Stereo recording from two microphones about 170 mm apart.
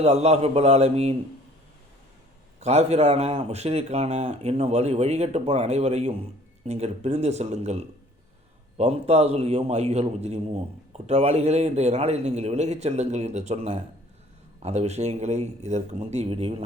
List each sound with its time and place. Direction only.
0.0 s a man's voice: 40° right (ahead or behind)
2.6 s a man's voice: 40° right (ahead or behind)